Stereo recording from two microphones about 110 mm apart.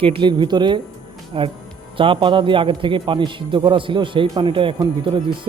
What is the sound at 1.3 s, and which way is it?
A man's voice, 55° right (ahead or behind).